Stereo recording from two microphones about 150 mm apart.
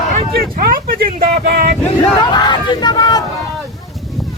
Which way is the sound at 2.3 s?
30° left (ahead or behind).